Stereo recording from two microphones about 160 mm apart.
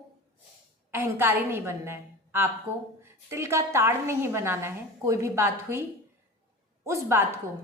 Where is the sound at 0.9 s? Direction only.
15° right (ahead or behind).